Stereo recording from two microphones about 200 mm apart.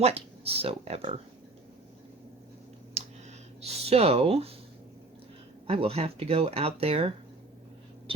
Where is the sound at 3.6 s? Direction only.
30° right (ahead or behind).